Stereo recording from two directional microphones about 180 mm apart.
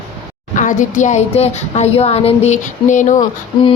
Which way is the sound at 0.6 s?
45° left (ahead or behind).